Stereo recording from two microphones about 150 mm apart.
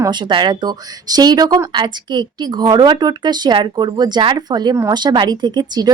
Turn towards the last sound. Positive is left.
turn(degrees=-30)  # may be behind; listen again after turning